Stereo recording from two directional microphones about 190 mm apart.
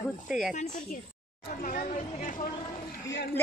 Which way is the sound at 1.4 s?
45° left (ahead or behind).